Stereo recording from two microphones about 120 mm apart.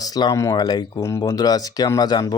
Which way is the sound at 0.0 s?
35° left (ahead or behind).